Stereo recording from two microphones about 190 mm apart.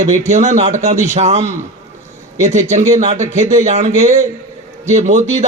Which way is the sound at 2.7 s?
40° right (ahead or behind).